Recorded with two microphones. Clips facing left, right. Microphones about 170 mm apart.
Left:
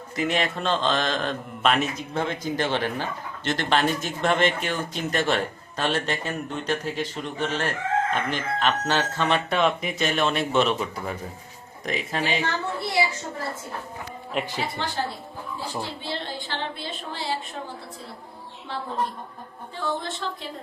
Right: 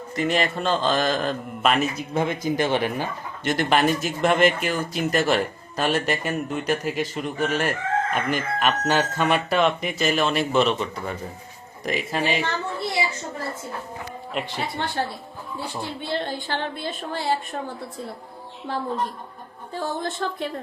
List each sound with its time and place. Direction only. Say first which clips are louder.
0.2 s a man's voice: right 2 dB; centre (ahead or behind)
9.6 s a man's voice: right 2 dB; centre (ahead or behind)
16.0 s a woman's voice: right 4 dB; 50° right (ahead or behind)
18.7 s a woman's voice: right 2 dB; 45° right (ahead or behind)